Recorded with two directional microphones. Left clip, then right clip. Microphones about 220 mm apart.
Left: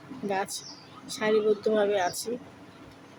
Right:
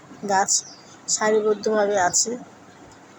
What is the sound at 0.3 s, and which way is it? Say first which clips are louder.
A woman's voice: right 10 dB; 10° left (ahead or behind).